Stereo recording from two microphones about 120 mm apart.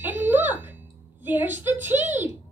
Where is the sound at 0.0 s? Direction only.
15° right (ahead or behind).